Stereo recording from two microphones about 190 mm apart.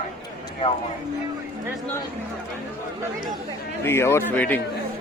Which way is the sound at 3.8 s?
15° left (ahead or behind).